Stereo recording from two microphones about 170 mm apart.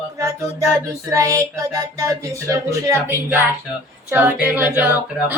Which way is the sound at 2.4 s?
20° right (ahead or behind).